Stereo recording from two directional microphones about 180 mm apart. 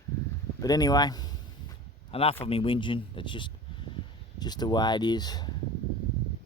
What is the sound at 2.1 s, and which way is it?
A man's voice, 30° left (ahead or behind).